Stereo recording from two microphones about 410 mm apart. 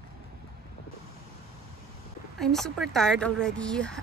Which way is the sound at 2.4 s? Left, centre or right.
Centre.